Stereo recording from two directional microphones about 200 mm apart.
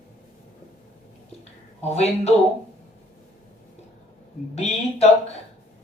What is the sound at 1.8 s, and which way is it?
Speech, 35° left (ahead or behind).